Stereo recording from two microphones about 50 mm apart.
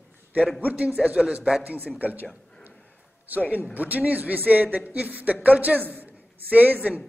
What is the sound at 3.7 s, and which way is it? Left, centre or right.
A man's voice, right.